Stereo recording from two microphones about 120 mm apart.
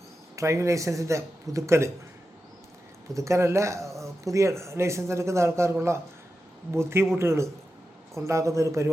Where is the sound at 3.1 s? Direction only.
25° right (ahead or behind).